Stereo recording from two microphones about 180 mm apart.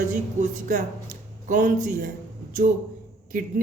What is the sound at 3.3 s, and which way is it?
Speech, 50° right (ahead or behind).